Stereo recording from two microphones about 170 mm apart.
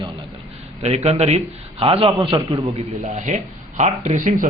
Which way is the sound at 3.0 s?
45° right (ahead or behind).